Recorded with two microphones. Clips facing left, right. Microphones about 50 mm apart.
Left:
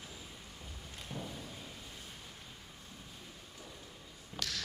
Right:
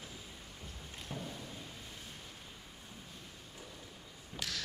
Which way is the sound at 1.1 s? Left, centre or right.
Centre.